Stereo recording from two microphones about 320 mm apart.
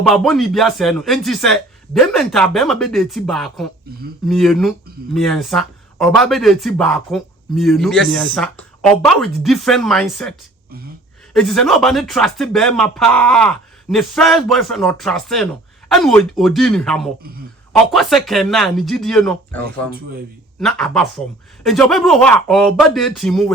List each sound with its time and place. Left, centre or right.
0.1 s speech: centre
11.3 s speech: centre